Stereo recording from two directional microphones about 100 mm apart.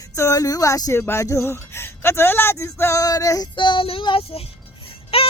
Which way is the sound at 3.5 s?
55° left (ahead or behind).